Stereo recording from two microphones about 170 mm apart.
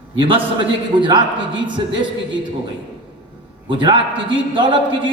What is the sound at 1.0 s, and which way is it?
A man's voice, 25° right (ahead or behind).